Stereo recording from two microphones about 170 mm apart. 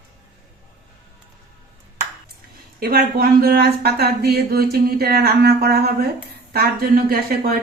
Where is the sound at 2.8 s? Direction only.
60° right (ahead or behind).